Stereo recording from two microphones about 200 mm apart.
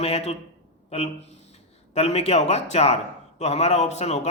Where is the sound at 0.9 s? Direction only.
30° left (ahead or behind).